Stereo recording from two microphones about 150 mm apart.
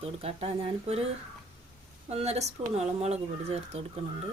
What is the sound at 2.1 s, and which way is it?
Speech, 45° right (ahead or behind).